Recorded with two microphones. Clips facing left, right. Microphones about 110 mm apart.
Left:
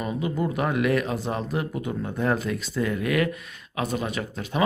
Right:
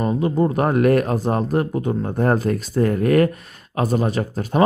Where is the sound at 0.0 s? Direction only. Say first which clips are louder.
Right 8 dB; 40° right (ahead or behind).